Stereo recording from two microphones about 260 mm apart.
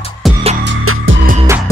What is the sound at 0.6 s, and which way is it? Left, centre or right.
Music, right.